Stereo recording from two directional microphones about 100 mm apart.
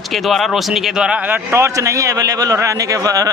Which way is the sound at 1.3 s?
25° right (ahead or behind).